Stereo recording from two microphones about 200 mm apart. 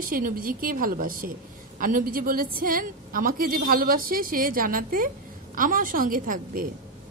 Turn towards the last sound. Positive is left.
turn(degrees=-45)  # may be behind; listen again after turning